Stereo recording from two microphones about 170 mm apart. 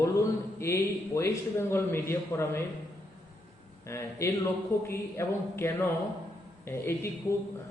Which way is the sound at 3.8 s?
15° left (ahead or behind).